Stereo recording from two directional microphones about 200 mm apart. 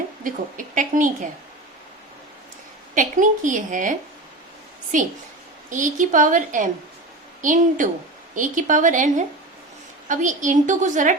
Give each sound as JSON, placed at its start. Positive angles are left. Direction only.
{"t": 0.3, "sound": "a woman's voice", "side_deg": -40}
{"t": 2.9, "sound": "a woman's voice", "side_deg": -40}
{"t": 4.9, "sound": "a woman's voice", "side_deg": -40}